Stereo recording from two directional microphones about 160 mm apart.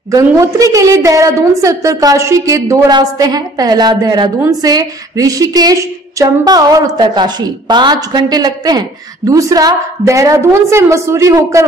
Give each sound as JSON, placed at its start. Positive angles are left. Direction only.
{"t": 0.1, "sound": "a woman's voice", "side_deg": -20}